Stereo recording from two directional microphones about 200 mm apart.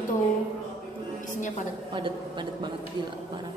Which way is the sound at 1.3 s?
40° left (ahead or behind).